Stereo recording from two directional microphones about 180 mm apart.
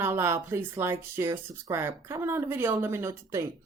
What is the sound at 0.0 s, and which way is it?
Speech, 15° right (ahead or behind).